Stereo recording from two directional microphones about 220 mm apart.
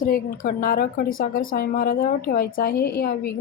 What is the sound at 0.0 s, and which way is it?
A woman's voice, 40° left (ahead or behind).